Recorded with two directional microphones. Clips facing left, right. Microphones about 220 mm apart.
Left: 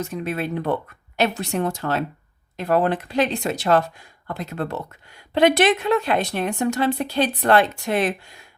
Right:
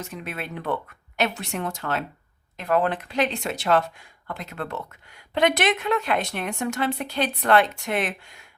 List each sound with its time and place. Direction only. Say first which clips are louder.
0.1 s a woman's voice: left 8 dB; 40° left (ahead or behind)